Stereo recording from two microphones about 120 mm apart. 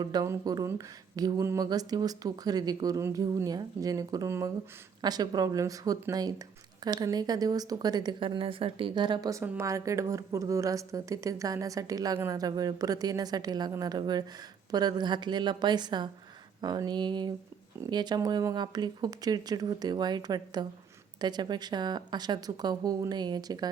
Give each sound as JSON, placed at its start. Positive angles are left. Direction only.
{"t": 0.0, "sound": "speech", "side_deg": -35}
{"t": 9.4, "sound": "a woman's voice", "side_deg": -25}